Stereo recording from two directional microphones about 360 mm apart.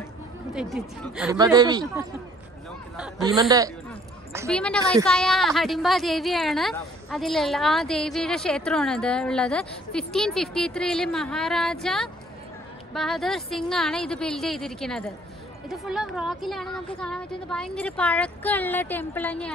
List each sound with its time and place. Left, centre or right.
0.6 s a woman's voice: centre